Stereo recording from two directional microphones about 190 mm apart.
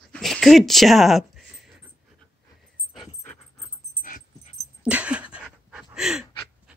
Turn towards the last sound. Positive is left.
turn(degrees=-5)  # may be behind; listen again after turning